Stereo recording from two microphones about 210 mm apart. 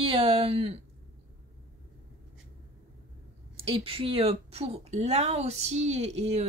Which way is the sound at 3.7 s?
25° right (ahead or behind).